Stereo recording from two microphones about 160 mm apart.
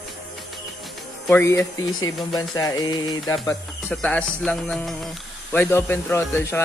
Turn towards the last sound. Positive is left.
turn(degrees=15)  # may be behind; listen again after turning